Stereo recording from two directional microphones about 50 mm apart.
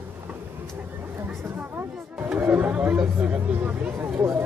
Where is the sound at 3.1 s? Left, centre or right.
Right.